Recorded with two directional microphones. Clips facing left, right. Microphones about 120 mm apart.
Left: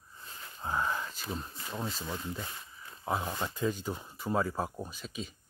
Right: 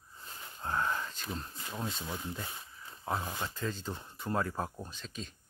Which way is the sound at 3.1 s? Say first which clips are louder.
Left 3 dB; 10° left (ahead or behind).